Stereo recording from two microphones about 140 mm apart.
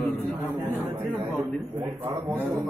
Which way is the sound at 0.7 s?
15° right (ahead or behind).